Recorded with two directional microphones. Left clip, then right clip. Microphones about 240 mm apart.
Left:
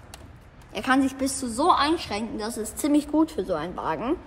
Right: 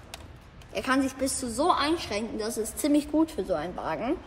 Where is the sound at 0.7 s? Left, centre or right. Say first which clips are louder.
Left 4 dB; left.